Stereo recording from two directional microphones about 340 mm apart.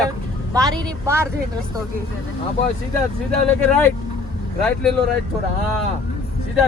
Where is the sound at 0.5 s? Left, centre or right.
Centre.